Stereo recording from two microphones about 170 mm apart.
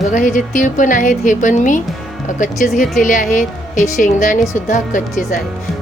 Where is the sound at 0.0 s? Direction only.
50° left (ahead or behind).